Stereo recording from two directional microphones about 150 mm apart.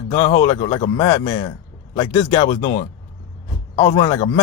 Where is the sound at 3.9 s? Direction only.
25° left (ahead or behind).